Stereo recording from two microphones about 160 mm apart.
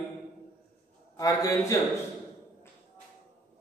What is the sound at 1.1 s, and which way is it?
Speech, 20° left (ahead or behind).